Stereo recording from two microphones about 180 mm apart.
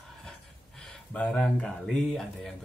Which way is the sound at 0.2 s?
Centre (ahead or behind).